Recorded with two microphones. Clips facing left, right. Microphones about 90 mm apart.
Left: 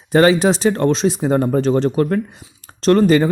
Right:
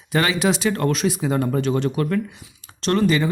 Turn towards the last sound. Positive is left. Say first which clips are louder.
# left 7 dB
turn(degrees=40)  # may be behind; listen again after turning